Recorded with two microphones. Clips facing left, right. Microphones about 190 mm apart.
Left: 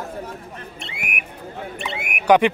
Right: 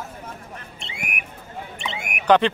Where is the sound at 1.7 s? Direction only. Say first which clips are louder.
Left 1 dB; 60° left (ahead or behind).